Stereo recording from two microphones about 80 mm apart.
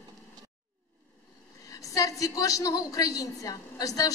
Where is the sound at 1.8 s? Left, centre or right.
Left.